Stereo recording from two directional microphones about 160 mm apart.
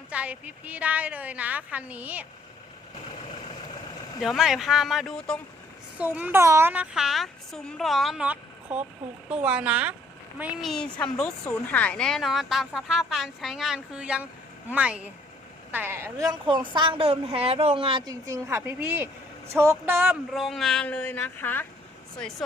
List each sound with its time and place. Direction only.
0.1 s a woman's voice: 10° right (ahead or behind)
4.2 s a woman's voice: centre (ahead or behind)
6.0 s a woman's voice: 10° right (ahead or behind)
20.3 s speech: centre (ahead or behind)